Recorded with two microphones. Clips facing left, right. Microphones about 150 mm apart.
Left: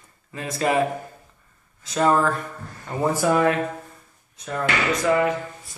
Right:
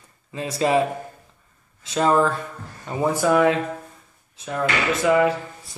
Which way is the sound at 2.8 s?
10° right (ahead or behind).